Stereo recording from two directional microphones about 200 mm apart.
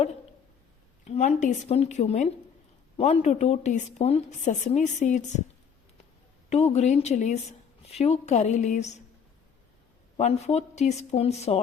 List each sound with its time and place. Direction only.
1.0 s a woman's voice: 35° left (ahead or behind)
6.5 s a woman's voice: 35° left (ahead or behind)
10.2 s a woman's voice: 30° left (ahead or behind)